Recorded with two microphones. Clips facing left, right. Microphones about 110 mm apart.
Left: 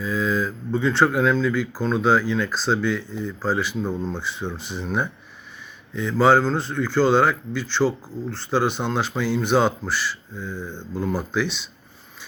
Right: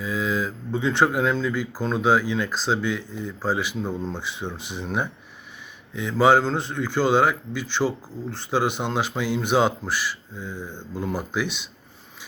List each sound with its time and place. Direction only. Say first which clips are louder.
0.0 s speech: left 2 dB; 15° right (ahead or behind)